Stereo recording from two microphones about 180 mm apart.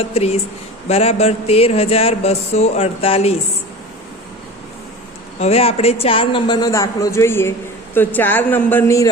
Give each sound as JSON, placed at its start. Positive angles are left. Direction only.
{"t": 0.1, "sound": "speech", "side_deg": 35}
{"t": 5.4, "sound": "a man's voice", "side_deg": 35}